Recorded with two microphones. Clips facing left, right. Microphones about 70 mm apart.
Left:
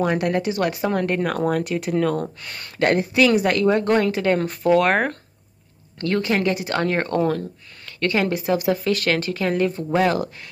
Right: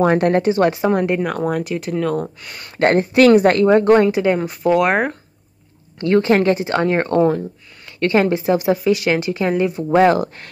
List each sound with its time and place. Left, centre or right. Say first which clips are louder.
0.0 s a woman's voice: right 6 dB; right; by 1.2 s centre
1.2 s speech: right 1 dB; centre
2.8 s speech: right 5 dB; right
3.6 s speech: right 6 dB; right; by 5.1 s centre
5.9 s a woman's voice: right 7 dB; right
6.3 s a woman's voice: right 6 dB; right
8.7 s speech: right 4 dB; centre
9.9 s a woman's voice: right 7 dB; right